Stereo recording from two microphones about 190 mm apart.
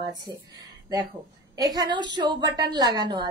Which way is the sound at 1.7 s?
20° right (ahead or behind).